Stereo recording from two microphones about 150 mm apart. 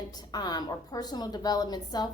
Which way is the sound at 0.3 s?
25° left (ahead or behind).